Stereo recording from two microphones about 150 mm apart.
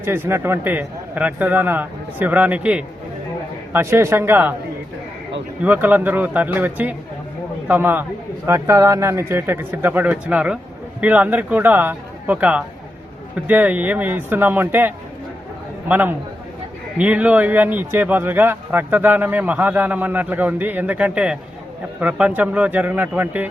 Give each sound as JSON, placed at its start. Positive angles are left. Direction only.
{"t": 0.0, "sound": "speech", "side_deg": -15}
{"t": 5.6, "sound": "speech", "side_deg": -10}